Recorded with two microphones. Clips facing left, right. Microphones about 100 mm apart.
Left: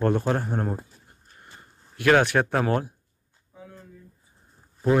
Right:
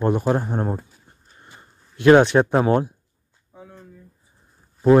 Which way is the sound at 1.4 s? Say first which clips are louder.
Right 2 dB; 25° right (ahead or behind).